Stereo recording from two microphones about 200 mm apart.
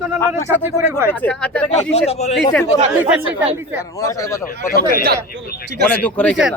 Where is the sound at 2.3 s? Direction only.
5° left (ahead or behind).